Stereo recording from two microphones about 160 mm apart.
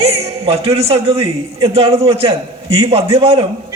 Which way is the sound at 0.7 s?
35° right (ahead or behind).